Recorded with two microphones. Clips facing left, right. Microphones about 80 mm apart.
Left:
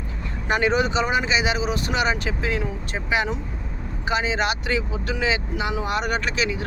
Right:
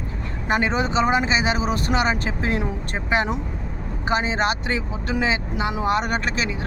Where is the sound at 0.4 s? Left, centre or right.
Right.